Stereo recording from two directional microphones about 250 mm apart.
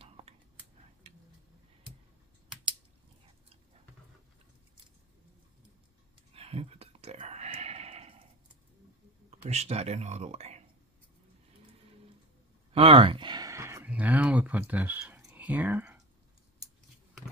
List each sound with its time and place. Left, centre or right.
6.3 s a sound: right
9.3 s speech: right
12.7 s speech: right